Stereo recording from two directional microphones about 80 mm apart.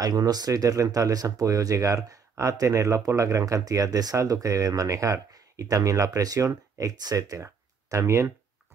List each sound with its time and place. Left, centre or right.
0.0 s speech: right